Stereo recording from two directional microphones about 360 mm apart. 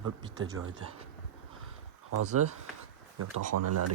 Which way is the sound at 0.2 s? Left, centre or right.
Centre.